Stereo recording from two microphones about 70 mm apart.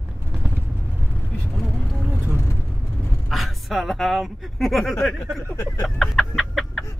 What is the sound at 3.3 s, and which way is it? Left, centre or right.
Speech, centre.